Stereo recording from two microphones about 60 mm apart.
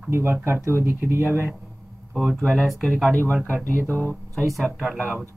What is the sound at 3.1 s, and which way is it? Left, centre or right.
Speech, left.